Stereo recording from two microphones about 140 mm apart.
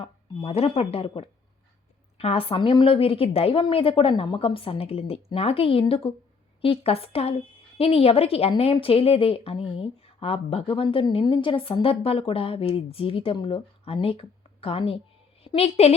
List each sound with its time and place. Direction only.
0.0 s a woman's voice: 45° left (ahead or behind)